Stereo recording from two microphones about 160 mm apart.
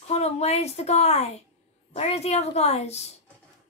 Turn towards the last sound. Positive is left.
turn(degrees=40)  # may be behind; listen again after turning